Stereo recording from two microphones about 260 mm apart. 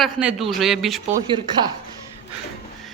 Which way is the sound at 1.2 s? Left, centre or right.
Centre.